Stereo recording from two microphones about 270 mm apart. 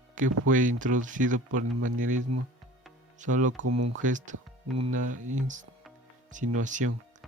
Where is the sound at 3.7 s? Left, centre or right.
Right.